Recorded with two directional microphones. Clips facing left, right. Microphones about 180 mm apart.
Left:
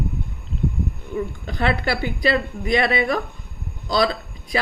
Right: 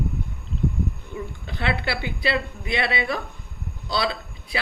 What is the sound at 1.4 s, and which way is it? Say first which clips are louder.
A woman's voice: left 3 dB; 45° left (ahead or behind).